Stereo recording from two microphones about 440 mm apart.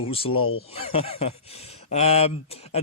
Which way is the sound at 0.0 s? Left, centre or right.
Centre.